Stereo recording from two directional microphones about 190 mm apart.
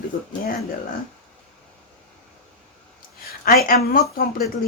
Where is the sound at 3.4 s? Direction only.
50° left (ahead or behind).